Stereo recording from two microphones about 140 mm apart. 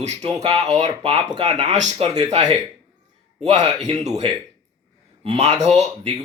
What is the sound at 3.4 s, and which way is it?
Speech, 55° right (ahead or behind).